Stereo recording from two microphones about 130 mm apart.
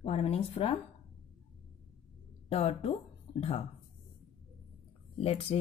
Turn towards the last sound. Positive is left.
turn(degrees=50)  # may be behind; listen again after turning